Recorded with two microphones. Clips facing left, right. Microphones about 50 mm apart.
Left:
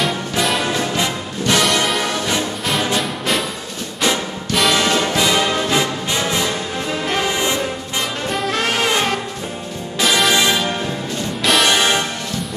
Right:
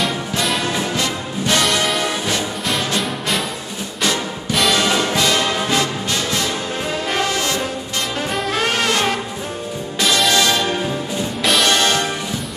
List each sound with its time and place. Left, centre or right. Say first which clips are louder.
0.0 s music: left 1 dB; centre
4.5 s music: left 1 dB; centre
5.1 s music: left 1 dB; centre
8.3 s brass instrument: even; centre
9.9 s music: left 1 dB; centre
10.3 s music: even; centre
11.4 s music: left 1 dB; centre
11.7 s music: left 1 dB; centre